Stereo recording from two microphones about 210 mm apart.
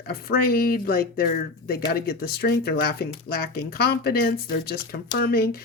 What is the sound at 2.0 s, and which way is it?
Speech, 45° left (ahead or behind).